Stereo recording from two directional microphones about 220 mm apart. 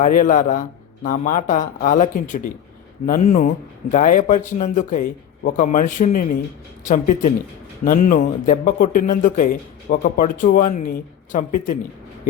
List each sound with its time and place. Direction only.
0.0 s speech: 35° left (ahead or behind)